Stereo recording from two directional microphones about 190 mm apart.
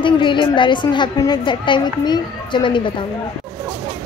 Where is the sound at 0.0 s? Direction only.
25° left (ahead or behind).